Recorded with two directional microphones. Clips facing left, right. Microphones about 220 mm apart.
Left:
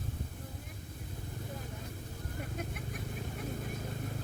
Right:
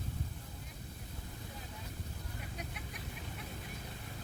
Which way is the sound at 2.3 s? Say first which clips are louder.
Left 7 dB; 50° left (ahead or behind).